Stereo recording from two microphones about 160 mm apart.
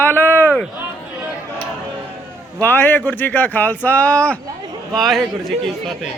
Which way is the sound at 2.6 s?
10° left (ahead or behind).